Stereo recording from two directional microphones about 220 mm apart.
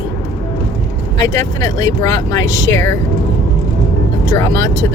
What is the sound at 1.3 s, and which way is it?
Speech, 15° left (ahead or behind).